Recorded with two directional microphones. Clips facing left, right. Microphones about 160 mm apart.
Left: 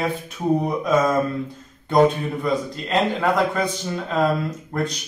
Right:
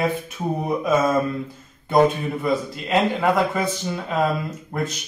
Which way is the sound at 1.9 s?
5° right (ahead or behind).